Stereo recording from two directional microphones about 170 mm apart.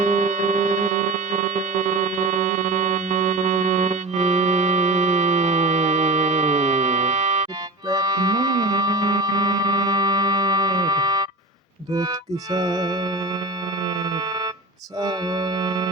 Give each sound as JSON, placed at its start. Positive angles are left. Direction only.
{"t": 0.0, "sound": "music", "side_deg": -45}
{"t": 15.0, "sound": "organ", "side_deg": -25}